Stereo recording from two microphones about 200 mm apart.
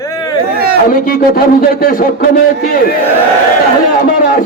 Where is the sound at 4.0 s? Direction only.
45° left (ahead or behind).